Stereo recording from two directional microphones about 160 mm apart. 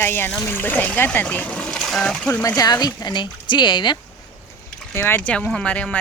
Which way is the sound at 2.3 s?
15° left (ahead or behind).